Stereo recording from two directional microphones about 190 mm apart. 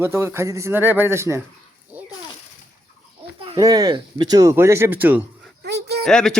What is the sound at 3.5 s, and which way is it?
Speech, 20° right (ahead or behind).